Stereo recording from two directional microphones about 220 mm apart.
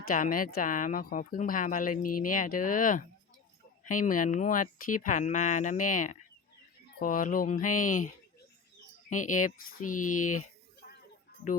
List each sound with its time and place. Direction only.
0.1 s a woman's voice: 35° left (ahead or behind)